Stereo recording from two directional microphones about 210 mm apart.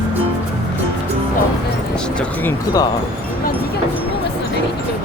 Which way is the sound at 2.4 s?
10° left (ahead or behind).